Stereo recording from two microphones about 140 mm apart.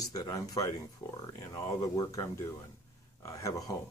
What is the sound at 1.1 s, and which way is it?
Speech, 25° left (ahead or behind).